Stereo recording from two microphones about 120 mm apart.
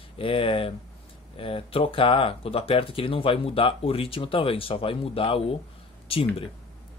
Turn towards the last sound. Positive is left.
turn(degrees=50)  # may be behind; listen again after turning